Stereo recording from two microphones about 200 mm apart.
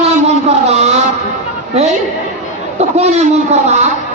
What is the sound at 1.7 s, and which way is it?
Speech, 35° right (ahead or behind).